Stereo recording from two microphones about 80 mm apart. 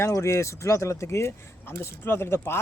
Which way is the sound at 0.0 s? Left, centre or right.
Left.